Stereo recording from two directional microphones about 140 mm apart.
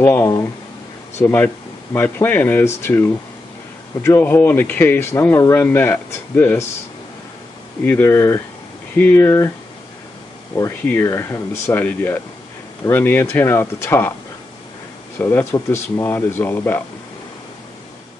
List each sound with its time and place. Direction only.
0.0 s speech: 15° left (ahead or behind)
7.8 s speech: 15° left (ahead or behind)
10.5 s speech: 25° left (ahead or behind)
15.1 s speech: 15° left (ahead or behind)